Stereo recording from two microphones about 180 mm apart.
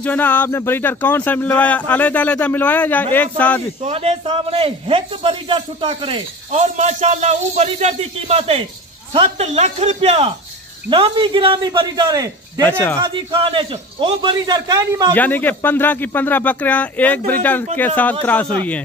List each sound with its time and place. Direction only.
0.0 s speech: 10° left (ahead or behind)
3.8 s a man's voice: 35° right (ahead or behind)
6.6 s a man's voice: 40° right (ahead or behind); by 15.1 s 20° right (ahead or behind)
15.1 s speech: 10° left (ahead or behind)